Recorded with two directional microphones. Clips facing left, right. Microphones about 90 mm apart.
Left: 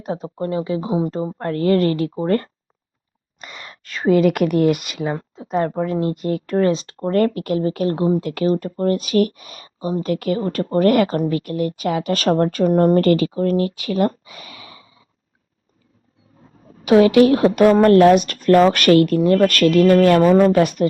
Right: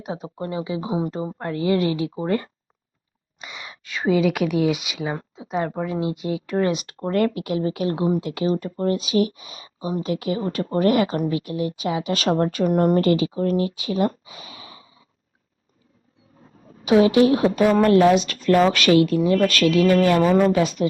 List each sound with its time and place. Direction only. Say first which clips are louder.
0.0 s speech: left 5 dB; 5° right (ahead or behind)
1.4 s speech: left 4 dB; 10° right (ahead or behind)
2.0 s a woman's voice: left 4 dB; 45° left (ahead or behind)
2.2 s speech: left 5 dB; 5° right (ahead or behind)
6.7 s a woman's voice: left 4 dB; 30° left (ahead or behind); by 15.0 s 65° left (ahead or behind)
16.8 s a woman's voice: left 4 dB; 60° left (ahead or behind)